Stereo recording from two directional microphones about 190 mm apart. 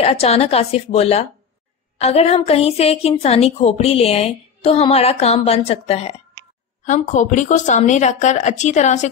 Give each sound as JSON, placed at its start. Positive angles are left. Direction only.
{"t": 0.0, "sound": "a woman's voice", "side_deg": 35}